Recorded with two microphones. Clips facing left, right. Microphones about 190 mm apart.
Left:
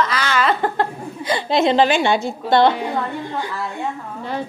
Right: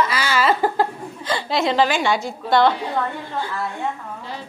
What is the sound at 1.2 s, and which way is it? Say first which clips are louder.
A woman's voice: left 4 dB; 15° left (ahead or behind).